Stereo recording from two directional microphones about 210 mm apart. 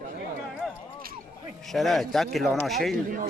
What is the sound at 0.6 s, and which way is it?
Speech, centre (ahead or behind).